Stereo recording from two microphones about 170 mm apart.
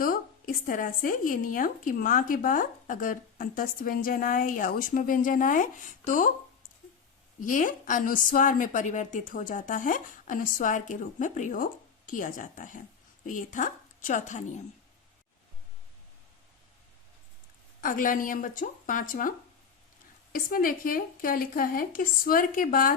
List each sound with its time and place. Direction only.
0.0 s speech: 55° left (ahead or behind)
7.4 s speech: 50° left (ahead or behind)
17.7 s speech: 50° left (ahead or behind)
20.3 s a woman's voice: 55° left (ahead or behind)